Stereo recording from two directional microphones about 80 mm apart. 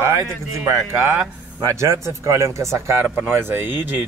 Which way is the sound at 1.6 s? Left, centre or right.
Right.